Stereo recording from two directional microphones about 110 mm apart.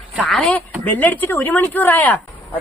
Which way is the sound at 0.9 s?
15° left (ahead or behind).